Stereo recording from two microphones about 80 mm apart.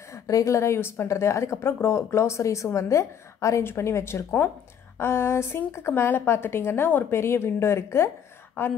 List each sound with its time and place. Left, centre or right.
0.1 s a woman's voice: left